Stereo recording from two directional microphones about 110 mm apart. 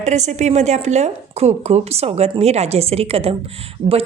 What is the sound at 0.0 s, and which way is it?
A woman's voice, 90° right.